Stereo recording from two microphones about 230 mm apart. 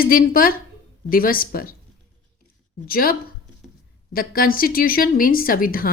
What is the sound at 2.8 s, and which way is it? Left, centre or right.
Speech, left.